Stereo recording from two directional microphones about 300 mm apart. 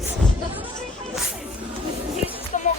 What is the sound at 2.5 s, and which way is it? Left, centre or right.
Music, left.